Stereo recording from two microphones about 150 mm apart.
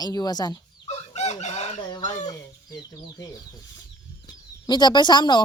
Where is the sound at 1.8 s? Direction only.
30° left (ahead or behind).